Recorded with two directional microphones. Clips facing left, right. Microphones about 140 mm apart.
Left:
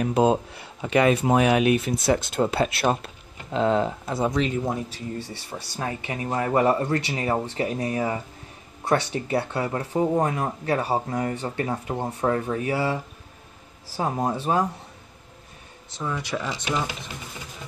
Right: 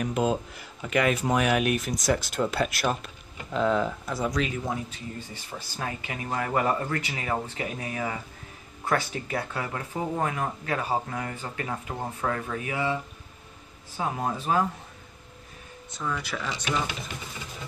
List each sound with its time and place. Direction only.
0.0 s speech: 30° left (ahead or behind)
16.0 s speech: 20° left (ahead or behind)